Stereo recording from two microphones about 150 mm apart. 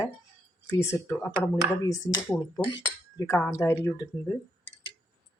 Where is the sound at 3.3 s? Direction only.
15° left (ahead or behind).